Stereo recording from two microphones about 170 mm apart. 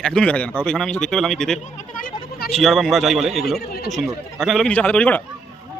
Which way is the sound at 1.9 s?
55° left (ahead or behind).